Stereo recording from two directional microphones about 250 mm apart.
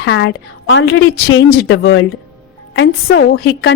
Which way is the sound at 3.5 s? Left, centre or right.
Left.